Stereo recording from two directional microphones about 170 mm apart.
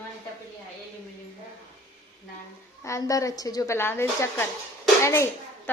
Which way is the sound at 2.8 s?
20° left (ahead or behind).